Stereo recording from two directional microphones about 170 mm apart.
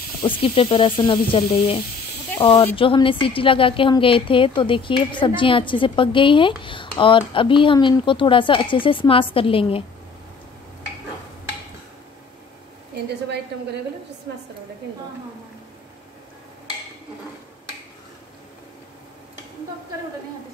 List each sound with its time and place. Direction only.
0.2 s speech: 30° left (ahead or behind)
12.9 s a woman's voice: 75° right (ahead or behind)